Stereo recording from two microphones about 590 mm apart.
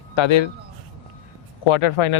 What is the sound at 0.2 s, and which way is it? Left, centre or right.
Speech, left.